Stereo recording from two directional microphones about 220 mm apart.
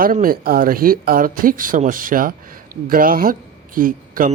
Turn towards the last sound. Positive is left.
turn(degrees=-40)  # may be behind; listen again after turning